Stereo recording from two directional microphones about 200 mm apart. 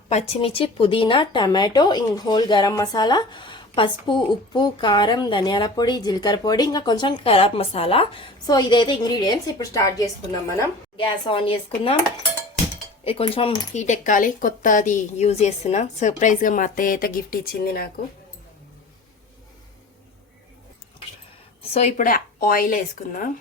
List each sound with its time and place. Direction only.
0.1 s a woman's voice: 30° left (ahead or behind); by 10.7 s 15° left (ahead or behind)
10.9 s speech: 25° left (ahead or behind)
13.1 s speech: 30° left (ahead or behind); by 17.8 s 50° left (ahead or behind)
21.7 s speech: 35° left (ahead or behind)